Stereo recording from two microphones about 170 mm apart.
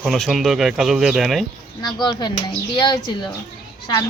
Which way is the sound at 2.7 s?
25° left (ahead or behind).